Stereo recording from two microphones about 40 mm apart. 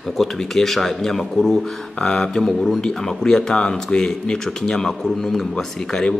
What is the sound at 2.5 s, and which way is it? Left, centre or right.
A man's voice, centre.